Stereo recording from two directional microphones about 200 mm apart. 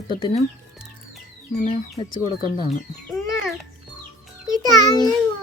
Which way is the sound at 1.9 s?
25° left (ahead or behind).